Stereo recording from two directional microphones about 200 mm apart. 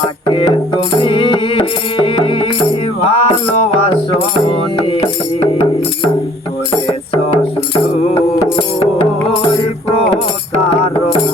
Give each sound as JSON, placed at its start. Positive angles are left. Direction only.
{"t": 0.3, "sound": "music", "side_deg": 25}